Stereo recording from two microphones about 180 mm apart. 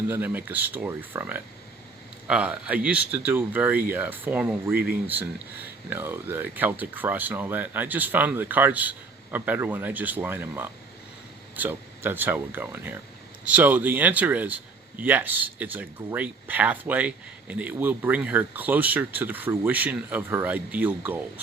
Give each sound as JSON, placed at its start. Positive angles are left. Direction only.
{"t": 0.1, "sound": "speech", "side_deg": -10}
{"t": 4.7, "sound": "speech", "side_deg": -55}
{"t": 5.0, "sound": "speech", "side_deg": -10}